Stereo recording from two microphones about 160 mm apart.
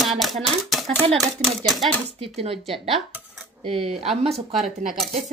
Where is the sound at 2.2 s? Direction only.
35° right (ahead or behind).